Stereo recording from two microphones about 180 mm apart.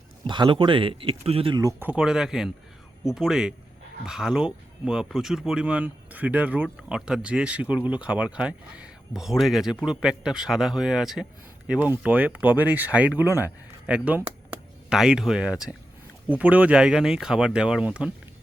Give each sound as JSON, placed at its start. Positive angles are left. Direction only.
{"t": 0.3, "sound": "speech", "side_deg": -25}
{"t": 1.8, "sound": "speech", "side_deg": -5}